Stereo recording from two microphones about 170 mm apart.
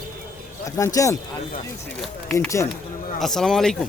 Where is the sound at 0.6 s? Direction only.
20° left (ahead or behind).